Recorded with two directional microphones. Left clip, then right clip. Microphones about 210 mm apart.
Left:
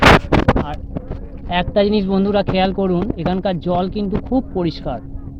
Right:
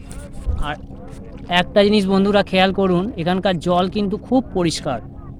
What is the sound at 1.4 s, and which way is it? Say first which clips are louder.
Speech: right 1 dB; 15° right (ahead or behind).